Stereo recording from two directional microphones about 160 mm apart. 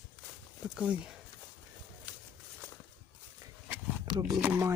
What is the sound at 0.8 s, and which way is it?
Speech, 5° right (ahead or behind).